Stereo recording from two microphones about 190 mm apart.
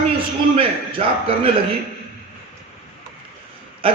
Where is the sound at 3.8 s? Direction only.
30° right (ahead or behind).